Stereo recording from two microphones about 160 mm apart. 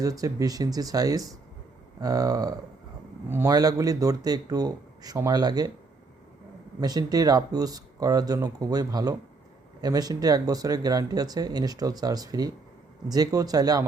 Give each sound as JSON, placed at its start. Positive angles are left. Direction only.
{"t": 0.0, "sound": "speech", "side_deg": -20}
{"t": 6.7, "sound": "speech", "side_deg": -25}